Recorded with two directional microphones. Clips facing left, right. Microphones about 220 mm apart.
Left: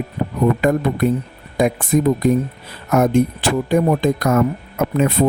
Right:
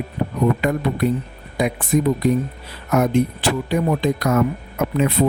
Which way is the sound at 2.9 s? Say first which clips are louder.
Left 3 dB; 50° left (ahead or behind).